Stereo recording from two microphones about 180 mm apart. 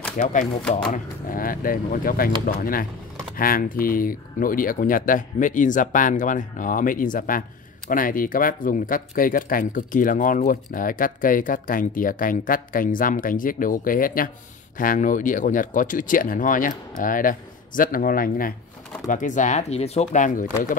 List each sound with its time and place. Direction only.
0.2 s speech: 45° left (ahead or behind)
0.6 s speech: 5° left (ahead or behind)
0.9 s speech: 50° left (ahead or behind)